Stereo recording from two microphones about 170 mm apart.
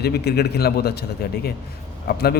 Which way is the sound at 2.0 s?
65° left (ahead or behind).